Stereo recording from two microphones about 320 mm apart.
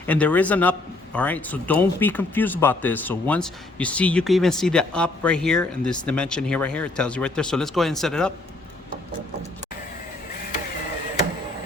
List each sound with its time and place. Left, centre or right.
0.0 s a man's voice: centre